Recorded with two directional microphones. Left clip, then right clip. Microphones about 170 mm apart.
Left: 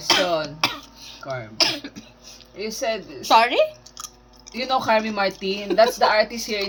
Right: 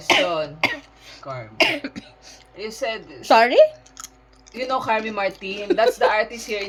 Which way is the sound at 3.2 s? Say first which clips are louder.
Right 3 dB; 45° right (ahead or behind).